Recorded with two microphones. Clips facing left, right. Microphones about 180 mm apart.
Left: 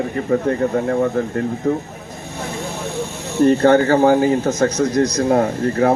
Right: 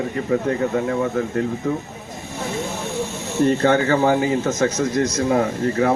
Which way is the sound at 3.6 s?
45° left (ahead or behind).